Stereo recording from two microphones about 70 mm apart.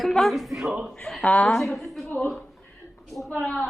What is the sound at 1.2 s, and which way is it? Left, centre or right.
Speech, centre.